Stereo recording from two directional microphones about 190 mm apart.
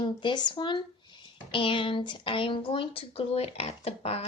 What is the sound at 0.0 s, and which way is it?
A woman's voice, 25° left (ahead or behind).